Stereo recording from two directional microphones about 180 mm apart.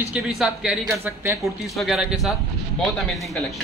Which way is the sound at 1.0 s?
15° right (ahead or behind).